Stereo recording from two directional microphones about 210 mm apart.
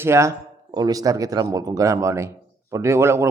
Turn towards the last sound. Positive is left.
turn(degrees=-10)  # may be behind; listen again after turning